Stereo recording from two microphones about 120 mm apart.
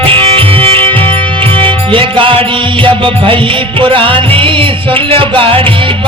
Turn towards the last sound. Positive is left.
turn(degrees=-45)  # may be behind; listen again after turning